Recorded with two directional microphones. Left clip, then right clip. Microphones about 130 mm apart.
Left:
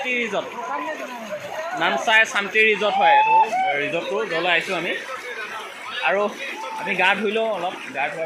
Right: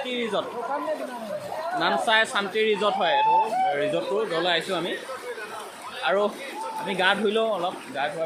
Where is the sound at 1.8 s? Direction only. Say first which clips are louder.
Left 4 dB; 5° left (ahead or behind).